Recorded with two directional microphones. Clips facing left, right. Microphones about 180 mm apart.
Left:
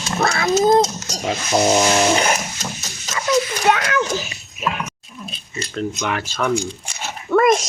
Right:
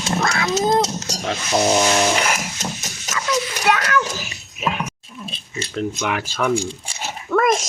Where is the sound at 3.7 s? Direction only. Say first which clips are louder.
Right 1 dB; 20° left (ahead or behind).